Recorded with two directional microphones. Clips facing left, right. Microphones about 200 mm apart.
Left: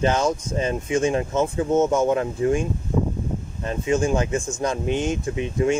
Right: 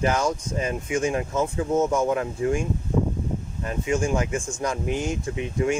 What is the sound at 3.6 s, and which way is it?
Speech, 25° left (ahead or behind).